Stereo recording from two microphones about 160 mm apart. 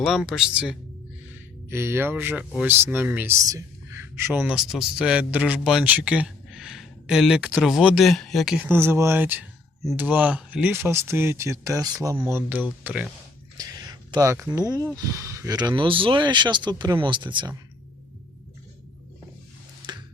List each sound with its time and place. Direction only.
0.0 s speech: centre (ahead or behind)
4.5 s speech: centre (ahead or behind)
13.6 s speech: 25° right (ahead or behind)